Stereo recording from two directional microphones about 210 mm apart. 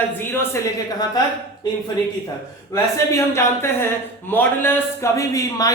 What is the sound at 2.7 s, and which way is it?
Speech, 15° left (ahead or behind).